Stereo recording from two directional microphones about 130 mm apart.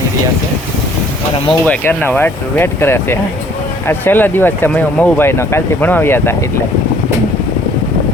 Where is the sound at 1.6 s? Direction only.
15° left (ahead or behind).